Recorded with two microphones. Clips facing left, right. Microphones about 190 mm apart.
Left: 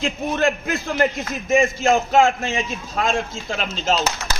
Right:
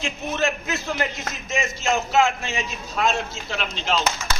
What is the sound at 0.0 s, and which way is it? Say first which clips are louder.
A man's voice: left 4 dB; 55° left (ahead or behind).